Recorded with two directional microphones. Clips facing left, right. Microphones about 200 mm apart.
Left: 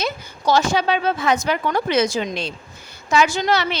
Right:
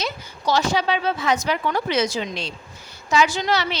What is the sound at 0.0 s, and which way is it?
A woman's voice, 50° left (ahead or behind).